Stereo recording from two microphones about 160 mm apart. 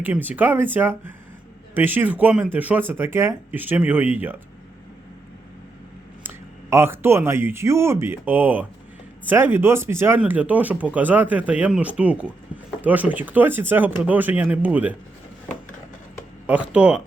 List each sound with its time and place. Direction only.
0.0 s speech: 10° right (ahead or behind)
6.2 s speech: 15° right (ahead or behind)
16.5 s speech: 10° right (ahead or behind)